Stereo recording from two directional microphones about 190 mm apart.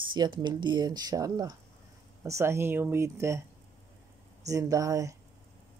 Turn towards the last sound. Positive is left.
turn(degrees=-15)  # may be behind; listen again after turning